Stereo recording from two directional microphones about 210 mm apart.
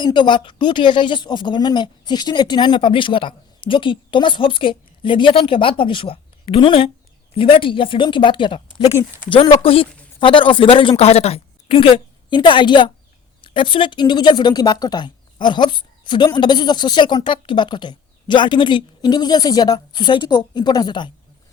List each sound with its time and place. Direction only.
0.0 s speech: 20° left (ahead or behind)